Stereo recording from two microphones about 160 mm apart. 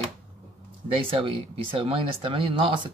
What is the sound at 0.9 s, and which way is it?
Speech, 35° right (ahead or behind).